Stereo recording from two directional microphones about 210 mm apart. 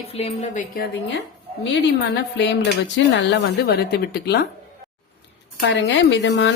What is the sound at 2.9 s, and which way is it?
A woman's voice, 55° left (ahead or behind).